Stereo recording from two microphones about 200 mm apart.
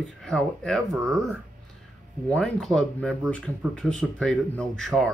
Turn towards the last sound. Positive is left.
turn(degrees=0)  # may be behind; listen again after turning